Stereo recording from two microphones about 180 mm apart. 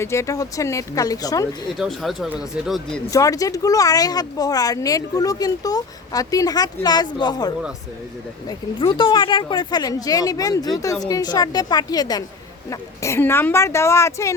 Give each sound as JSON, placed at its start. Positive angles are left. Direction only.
{"t": 0.0, "sound": "speech", "side_deg": 15}
{"t": 1.8, "sound": "speech", "side_deg": 0}
{"t": 3.1, "sound": "speech", "side_deg": 20}